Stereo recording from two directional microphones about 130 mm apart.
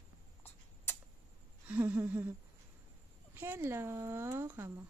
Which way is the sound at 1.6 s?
15° right (ahead or behind).